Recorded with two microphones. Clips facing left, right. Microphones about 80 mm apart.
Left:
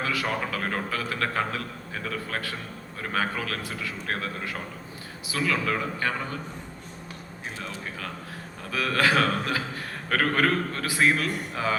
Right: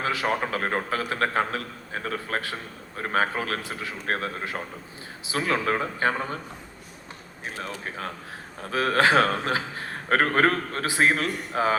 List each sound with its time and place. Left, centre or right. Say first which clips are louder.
0.0 s a man's voice: right 2 dB; right
7.6 s a man's voice: right 4 dB; right